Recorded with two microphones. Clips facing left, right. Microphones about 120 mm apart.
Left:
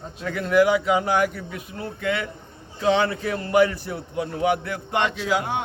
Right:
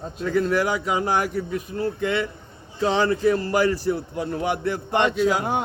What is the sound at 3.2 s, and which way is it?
A man's voice, 35° right (ahead or behind).